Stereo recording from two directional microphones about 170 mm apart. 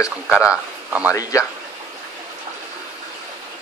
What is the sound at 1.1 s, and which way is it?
Speech, 20° left (ahead or behind).